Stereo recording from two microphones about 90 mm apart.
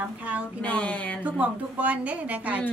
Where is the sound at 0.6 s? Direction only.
15° left (ahead or behind).